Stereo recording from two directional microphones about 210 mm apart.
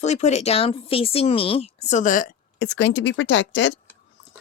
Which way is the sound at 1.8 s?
35° left (ahead or behind).